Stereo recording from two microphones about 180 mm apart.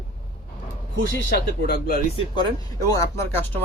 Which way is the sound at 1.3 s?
60° left (ahead or behind).